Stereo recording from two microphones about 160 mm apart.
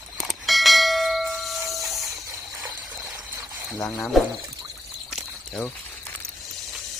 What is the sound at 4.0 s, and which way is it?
Speech, centre (ahead or behind).